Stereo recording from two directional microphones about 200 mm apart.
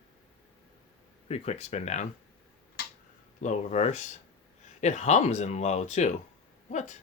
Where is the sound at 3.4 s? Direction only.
35° left (ahead or behind).